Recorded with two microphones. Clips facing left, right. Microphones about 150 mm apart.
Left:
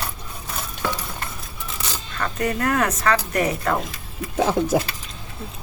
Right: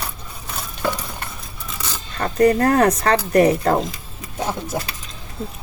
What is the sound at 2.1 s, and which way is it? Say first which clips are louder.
Speech: right 9 dB; 35° right (ahead or behind).